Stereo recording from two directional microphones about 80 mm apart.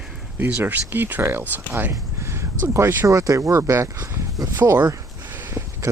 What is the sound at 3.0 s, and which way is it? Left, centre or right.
Speech, right.